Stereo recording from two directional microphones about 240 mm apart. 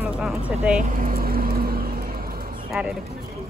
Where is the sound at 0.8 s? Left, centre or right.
Right.